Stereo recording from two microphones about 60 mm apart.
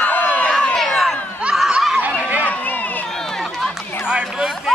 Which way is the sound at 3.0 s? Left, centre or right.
Centre.